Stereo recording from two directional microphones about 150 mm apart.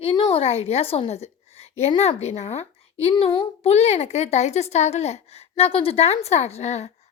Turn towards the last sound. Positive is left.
turn(degrees=50)  # may be behind; listen again after turning